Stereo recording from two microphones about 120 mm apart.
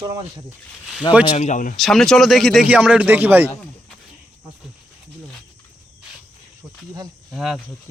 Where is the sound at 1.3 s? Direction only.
85° left.